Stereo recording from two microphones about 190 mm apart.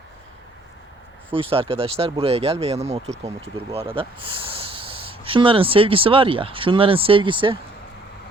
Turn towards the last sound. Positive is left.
turn(degrees=-25)  # may be behind; listen again after turning